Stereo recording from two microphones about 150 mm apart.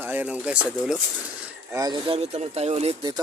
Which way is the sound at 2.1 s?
45° right (ahead or behind).